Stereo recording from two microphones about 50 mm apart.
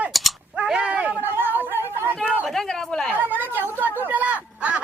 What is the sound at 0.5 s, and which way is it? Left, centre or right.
Whip, right.